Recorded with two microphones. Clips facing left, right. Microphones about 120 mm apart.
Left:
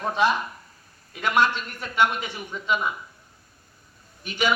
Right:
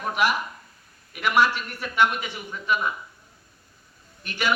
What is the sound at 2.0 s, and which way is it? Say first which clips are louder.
Speech: even; 15° left (ahead or behind).